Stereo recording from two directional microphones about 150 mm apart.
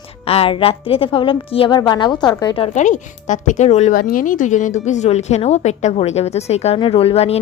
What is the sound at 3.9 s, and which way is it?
A woman's voice, 65° left (ahead or behind).